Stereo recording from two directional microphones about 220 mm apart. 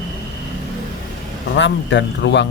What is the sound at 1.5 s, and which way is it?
Speech, 55° left (ahead or behind).